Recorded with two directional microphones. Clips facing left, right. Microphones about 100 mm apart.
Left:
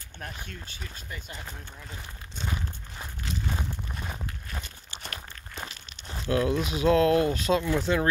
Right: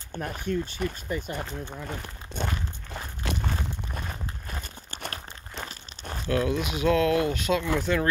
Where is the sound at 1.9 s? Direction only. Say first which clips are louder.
Right 6 dB; 60° right (ahead or behind).